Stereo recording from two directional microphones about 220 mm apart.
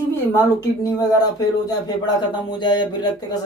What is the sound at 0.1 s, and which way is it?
Speech, 15° left (ahead or behind).